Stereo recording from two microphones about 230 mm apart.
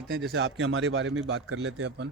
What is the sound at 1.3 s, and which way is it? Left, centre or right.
Speech, right.